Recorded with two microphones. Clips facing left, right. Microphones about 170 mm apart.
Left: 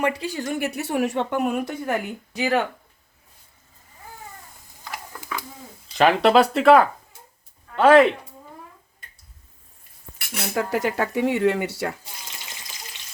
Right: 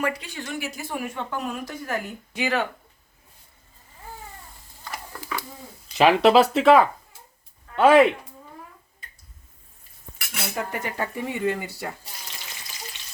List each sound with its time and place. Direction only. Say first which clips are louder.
0.0 s speech: left 4 dB; 30° left (ahead or behind)
0.6 s speech: left 10 dB; 70° left (ahead or behind)
2.3 s speech: left 3 dB; 35° left (ahead or behind)
4.8 s biting: even; 15° left (ahead or behind)
6.0 s speech: even; centre (ahead or behind)
10.5 s speech: left 8 dB; 90° left